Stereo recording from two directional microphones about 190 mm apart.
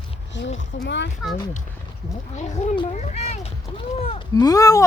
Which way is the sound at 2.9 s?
40° left (ahead or behind).